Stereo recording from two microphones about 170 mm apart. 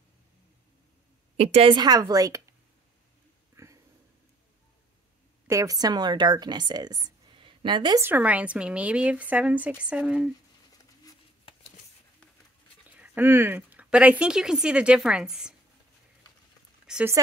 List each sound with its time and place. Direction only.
1.3 s a woman's voice: 40° right (ahead or behind); by 2.5 s 20° right (ahead or behind)
3.5 s a sound: 20° right (ahead or behind)
5.5 s a woman's voice: 20° right (ahead or behind)
8.0 s speech: 10° right (ahead or behind)
12.8 s speech: 10° right (ahead or behind)
16.8 s a sound: 5° right (ahead or behind)